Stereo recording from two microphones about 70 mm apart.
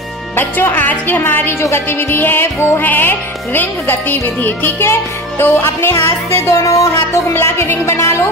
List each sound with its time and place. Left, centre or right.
0.4 s music: left
6.6 s music: left
7.3 s music: left